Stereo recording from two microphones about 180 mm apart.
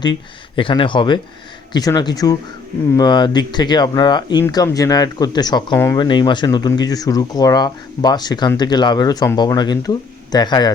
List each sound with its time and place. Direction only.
0.0 s speech: 25° left (ahead or behind)